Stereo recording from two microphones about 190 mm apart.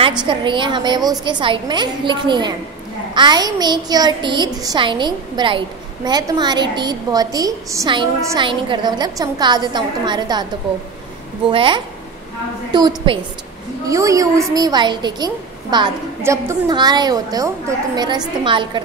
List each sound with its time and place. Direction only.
0.2 s a woman's voice: 25° right (ahead or behind)
11.5 s a woman's voice: 25° right (ahead or behind)